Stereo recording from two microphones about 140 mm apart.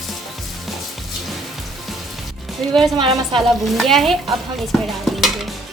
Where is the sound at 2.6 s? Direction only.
5° left (ahead or behind).